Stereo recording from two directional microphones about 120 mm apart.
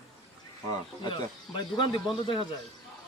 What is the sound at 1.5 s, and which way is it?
Speech, 40° left (ahead or behind).